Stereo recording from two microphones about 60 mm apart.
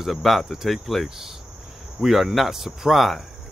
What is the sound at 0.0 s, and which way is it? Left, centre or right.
Speech, centre.